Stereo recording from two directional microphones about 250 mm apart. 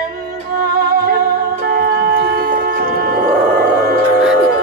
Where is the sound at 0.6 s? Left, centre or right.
Right.